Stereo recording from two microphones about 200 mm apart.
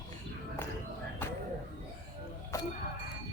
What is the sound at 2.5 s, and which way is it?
Music, 15° left (ahead or behind).